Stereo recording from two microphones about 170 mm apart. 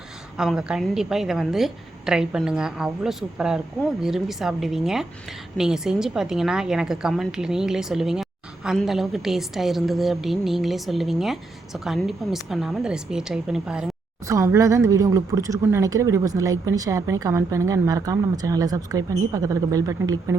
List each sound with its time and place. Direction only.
0.3 s a woman's voice: 5° right (ahead or behind)
14.3 s speech: 20° right (ahead or behind)